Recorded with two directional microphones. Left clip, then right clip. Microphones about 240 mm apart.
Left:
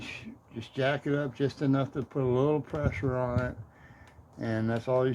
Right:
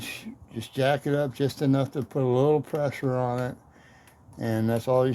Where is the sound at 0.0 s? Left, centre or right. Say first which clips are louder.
Right 4 dB; right.